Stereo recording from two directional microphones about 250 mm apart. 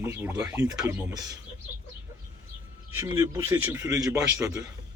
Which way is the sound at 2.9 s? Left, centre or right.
Centre.